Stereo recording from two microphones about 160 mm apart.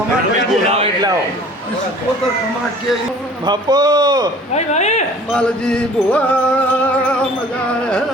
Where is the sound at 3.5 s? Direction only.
25° right (ahead or behind).